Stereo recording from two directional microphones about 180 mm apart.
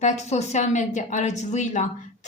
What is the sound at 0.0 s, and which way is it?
A woman's voice, 40° left (ahead or behind).